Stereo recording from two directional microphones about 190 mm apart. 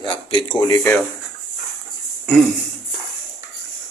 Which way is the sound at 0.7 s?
10° left (ahead or behind).